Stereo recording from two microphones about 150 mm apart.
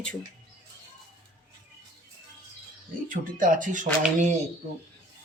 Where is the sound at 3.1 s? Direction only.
65° right (ahead or behind).